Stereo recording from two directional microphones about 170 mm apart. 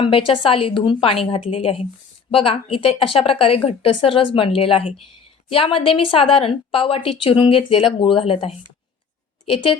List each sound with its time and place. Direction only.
0.0 s a woman's voice: 30° left (ahead or behind)